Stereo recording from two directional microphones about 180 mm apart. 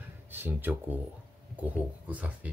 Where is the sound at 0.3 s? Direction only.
10° right (ahead or behind).